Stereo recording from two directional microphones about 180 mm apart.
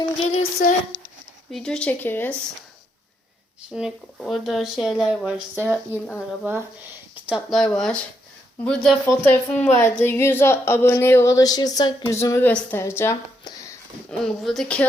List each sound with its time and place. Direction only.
0.2 s music: 40° left (ahead or behind)
1.5 s speech: 5° left (ahead or behind)
3.7 s speech: 5° right (ahead or behind); by 13.7 s 15° left (ahead or behind)
14.1 s speech: centre (ahead or behind)